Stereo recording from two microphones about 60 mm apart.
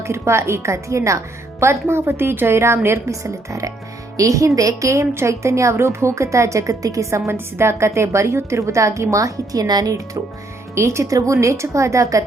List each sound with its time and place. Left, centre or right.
0.0 s a woman's voice: right
1.7 s a woman's voice: right
7.3 s a woman's voice: right
10.8 s a woman's voice: right